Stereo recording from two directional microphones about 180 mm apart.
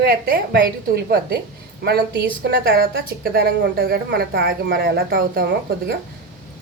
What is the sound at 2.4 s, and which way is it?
A woman's voice, 65° right (ahead or behind).